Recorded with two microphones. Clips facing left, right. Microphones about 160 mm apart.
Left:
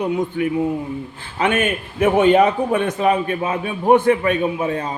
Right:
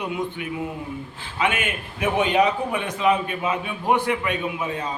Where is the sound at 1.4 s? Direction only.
45° left (ahead or behind).